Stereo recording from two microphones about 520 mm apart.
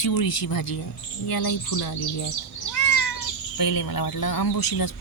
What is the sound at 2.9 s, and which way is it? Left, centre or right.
Cat, left.